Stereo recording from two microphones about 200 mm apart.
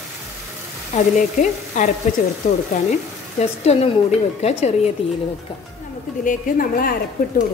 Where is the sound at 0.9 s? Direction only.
40° left (ahead or behind).